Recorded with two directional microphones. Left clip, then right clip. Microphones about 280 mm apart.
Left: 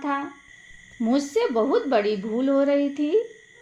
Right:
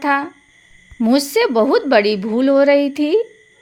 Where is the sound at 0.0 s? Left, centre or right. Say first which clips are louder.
Right 10 dB; right.